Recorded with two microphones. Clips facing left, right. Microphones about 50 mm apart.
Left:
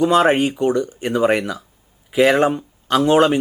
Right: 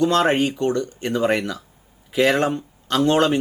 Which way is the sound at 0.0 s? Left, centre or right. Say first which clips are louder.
Left 3 dB; centre.